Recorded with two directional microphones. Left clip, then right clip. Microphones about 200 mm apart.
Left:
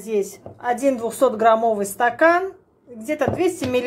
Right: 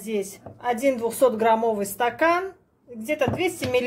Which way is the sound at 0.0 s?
10° left (ahead or behind).